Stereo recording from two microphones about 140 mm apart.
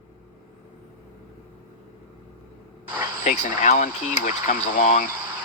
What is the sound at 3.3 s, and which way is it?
Speech, 60° left (ahead or behind).